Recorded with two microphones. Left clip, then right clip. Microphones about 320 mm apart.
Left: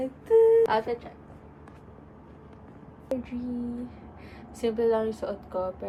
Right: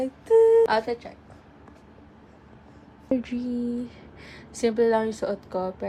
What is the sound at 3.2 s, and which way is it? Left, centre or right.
Speech, right.